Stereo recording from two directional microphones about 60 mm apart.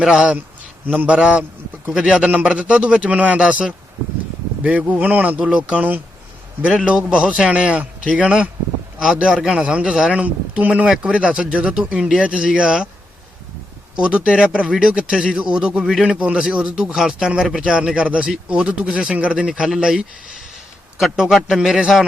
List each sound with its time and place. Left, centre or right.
0.0 s speech: centre; by 5.5 s right
5.5 s speech: centre
5.7 s speech: right
9.3 s speech: centre
13.9 s speech: centre
15.8 s speech: centre
16.0 s speech: right; by 22.0 s centre